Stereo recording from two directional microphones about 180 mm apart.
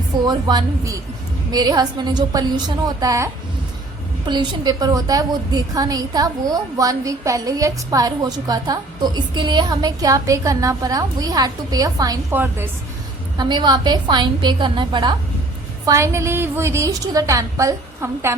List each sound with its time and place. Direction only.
0.3 s a woman's voice: 25° right (ahead or behind)
4.3 s a woman's voice: 25° right (ahead or behind)
13.3 s a woman's voice: 25° right (ahead or behind)
15.9 s a woman's voice: 15° right (ahead or behind)